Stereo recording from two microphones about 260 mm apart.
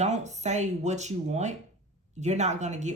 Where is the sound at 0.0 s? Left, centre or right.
Right.